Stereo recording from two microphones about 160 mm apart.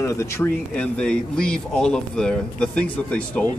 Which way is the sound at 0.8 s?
5° left (ahead or behind).